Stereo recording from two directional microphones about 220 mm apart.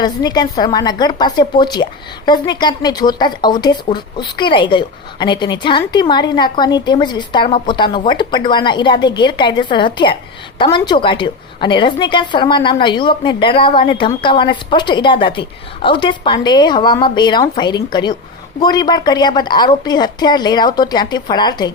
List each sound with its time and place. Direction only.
0.0 s a woman's voice: 20° left (ahead or behind)